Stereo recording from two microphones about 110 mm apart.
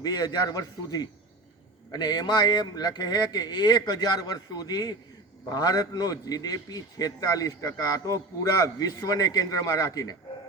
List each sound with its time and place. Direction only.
0.0 s a man's voice: 35° left (ahead or behind)